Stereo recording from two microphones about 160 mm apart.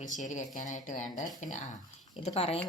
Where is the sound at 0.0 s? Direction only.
50° left (ahead or behind).